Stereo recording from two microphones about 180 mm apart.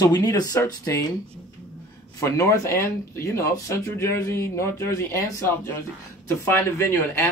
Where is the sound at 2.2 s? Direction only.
15° left (ahead or behind).